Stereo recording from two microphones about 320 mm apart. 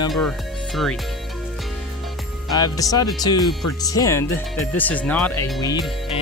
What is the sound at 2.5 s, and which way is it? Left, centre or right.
Speech, centre.